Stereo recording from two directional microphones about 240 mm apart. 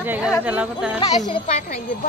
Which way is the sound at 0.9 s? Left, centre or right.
Left.